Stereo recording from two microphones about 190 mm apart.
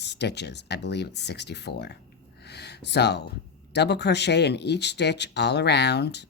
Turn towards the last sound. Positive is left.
turn(degrees=60)  # may be behind; listen again after turning